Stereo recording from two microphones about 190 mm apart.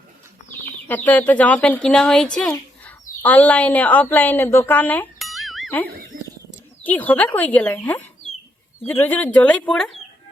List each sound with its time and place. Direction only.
0.9 s speech: 10° left (ahead or behind)
6.1 s a sound: 45° right (ahead or behind)
6.8 s speech: 10° left (ahead or behind)